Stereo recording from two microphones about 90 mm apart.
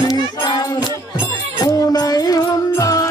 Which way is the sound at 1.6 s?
40° left (ahead or behind).